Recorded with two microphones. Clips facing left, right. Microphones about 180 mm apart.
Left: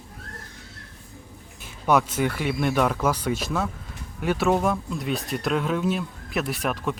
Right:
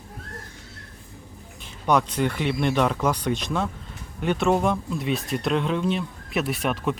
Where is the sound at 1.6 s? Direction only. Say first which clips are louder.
Even; 5° left (ahead or behind).